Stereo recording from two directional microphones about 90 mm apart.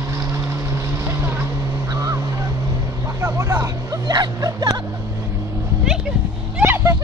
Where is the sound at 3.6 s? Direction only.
40° right (ahead or behind).